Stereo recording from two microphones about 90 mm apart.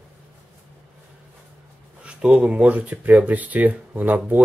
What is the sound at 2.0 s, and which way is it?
Speech, 10° right (ahead or behind).